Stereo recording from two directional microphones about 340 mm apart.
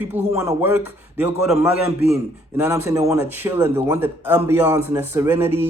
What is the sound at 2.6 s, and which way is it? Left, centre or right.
A man's voice, centre.